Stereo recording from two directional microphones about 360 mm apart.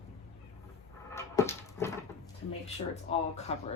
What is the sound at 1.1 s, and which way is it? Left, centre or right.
Dog, centre.